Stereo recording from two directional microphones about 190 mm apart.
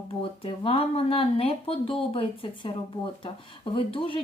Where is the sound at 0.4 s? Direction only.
30° left (ahead or behind).